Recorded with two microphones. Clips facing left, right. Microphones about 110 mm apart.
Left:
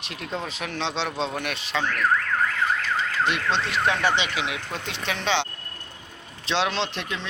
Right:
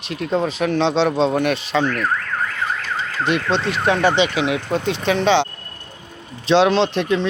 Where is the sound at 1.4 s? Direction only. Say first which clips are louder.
Right 10 dB; 40° right (ahead or behind).